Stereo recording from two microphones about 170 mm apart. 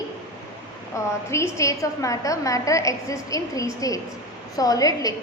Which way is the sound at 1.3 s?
15° left (ahead or behind).